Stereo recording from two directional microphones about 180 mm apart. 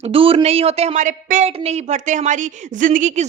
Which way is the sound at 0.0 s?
30° right (ahead or behind).